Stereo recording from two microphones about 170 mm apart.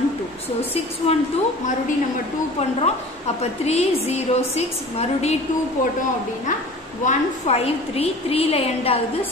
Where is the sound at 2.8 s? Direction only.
40° left (ahead or behind).